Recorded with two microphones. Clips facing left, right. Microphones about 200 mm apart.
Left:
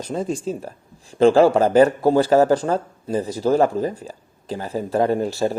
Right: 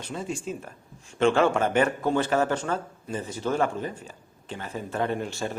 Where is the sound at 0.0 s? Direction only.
40° left (ahead or behind).